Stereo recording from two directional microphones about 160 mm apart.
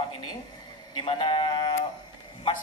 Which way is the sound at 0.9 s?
30° left (ahead or behind).